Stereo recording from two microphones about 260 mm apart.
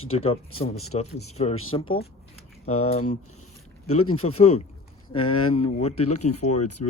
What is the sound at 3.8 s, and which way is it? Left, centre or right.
Speech, left.